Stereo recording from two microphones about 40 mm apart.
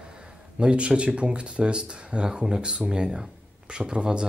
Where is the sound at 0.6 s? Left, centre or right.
Right.